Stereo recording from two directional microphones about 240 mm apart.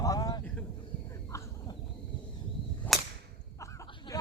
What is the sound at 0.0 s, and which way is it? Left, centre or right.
Vehicle, centre.